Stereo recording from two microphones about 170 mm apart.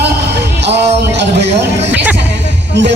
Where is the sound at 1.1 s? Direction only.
90° right.